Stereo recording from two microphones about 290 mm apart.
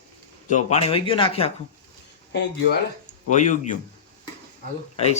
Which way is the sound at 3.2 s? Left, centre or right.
Left.